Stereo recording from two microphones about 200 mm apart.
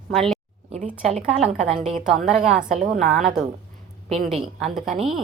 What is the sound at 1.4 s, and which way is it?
A woman's voice, centre (ahead or behind).